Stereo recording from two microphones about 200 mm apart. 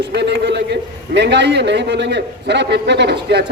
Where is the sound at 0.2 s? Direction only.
60° right (ahead or behind).